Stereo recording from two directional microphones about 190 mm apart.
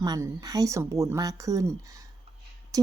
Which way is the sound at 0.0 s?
20° right (ahead or behind).